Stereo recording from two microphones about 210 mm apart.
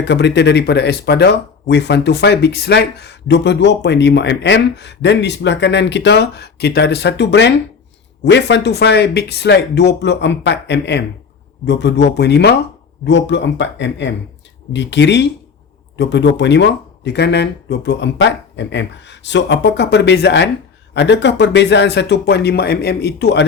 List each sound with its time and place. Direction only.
0.0 s speech: 55° left (ahead or behind)